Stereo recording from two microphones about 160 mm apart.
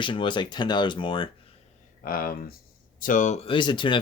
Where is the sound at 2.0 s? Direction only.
65° left (ahead or behind).